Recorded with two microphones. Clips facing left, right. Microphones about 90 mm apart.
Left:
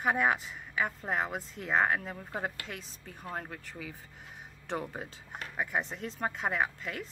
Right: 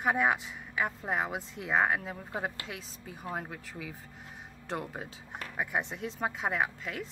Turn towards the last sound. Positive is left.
turn(degrees=0)  # may be behind; listen again after turning